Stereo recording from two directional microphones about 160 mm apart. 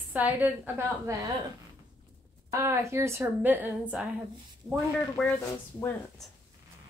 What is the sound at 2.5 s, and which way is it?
Speech, 20° right (ahead or behind).